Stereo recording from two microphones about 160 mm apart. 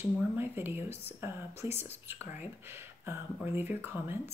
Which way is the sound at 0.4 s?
15° right (ahead or behind).